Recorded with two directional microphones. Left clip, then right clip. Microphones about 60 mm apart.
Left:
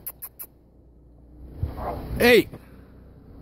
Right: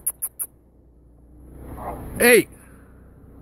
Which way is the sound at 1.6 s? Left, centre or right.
Centre.